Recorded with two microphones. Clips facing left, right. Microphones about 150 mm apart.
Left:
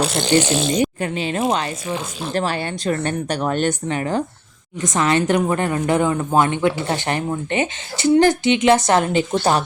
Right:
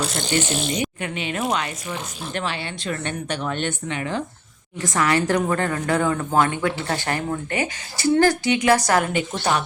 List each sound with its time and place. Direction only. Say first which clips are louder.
0.0 s speech: left 6 dB; 70° left (ahead or behind); by 0.7 s 90° left
0.7 s speech: left 6 dB; 35° left (ahead or behind)
2.3 s speech: left 6 dB; 40° left (ahead or behind)
4.8 s a woman's voice: left 2 dB; 20° left (ahead or behind)
9.3 s speech: left 5 dB; 35° left (ahead or behind)